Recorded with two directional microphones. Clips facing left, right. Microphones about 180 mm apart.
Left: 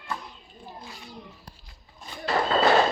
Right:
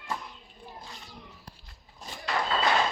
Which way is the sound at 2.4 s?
45° left (ahead or behind).